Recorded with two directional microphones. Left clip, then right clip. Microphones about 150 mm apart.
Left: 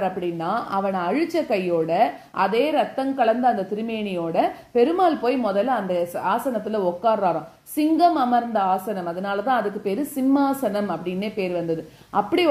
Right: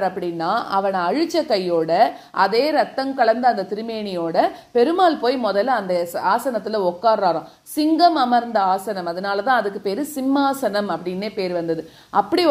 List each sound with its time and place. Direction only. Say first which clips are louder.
0.0 s a woman's voice: right 3 dB; 25° right (ahead or behind)